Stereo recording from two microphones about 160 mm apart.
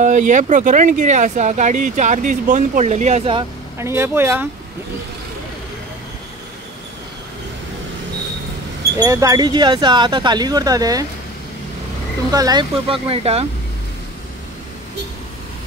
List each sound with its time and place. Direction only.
0.0 s speech: 50° right (ahead or behind)
3.7 s speech: 15° right (ahead or behind)
8.9 s speech: 20° right (ahead or behind)
12.3 s speech: 25° right (ahead or behind)